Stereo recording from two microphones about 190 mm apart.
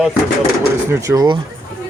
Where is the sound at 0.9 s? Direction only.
15° right (ahead or behind).